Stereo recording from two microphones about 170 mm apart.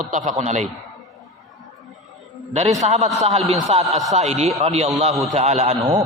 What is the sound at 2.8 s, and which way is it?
A man's voice, 40° right (ahead or behind).